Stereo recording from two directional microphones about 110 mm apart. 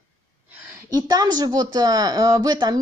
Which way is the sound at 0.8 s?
35° right (ahead or behind).